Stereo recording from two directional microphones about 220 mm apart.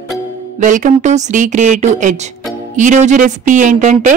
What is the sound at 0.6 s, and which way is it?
Speech, 35° right (ahead or behind).